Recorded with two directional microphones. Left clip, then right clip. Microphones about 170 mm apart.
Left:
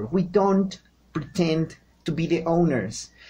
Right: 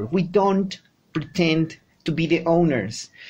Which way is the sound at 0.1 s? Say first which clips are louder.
Right 1 dB; 25° right (ahead or behind).